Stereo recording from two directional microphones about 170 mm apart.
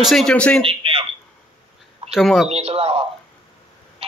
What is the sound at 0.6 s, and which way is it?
Speech, 30° right (ahead or behind).